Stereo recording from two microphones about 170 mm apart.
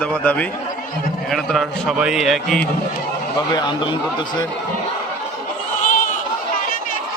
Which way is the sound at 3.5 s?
25° left (ahead or behind).